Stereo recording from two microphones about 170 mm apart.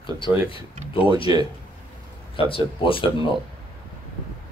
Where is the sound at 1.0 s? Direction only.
30° left (ahead or behind).